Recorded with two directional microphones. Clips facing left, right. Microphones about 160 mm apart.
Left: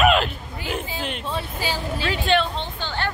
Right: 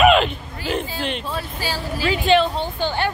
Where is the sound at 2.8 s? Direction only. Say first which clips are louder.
Right 6 dB; 15° right (ahead or behind).